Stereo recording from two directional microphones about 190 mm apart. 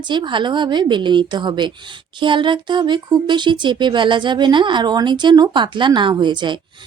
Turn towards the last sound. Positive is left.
turn(degrees=-25)  # may be behind; listen again after turning